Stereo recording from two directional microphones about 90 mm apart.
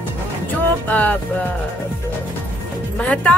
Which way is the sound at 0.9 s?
15° left (ahead or behind).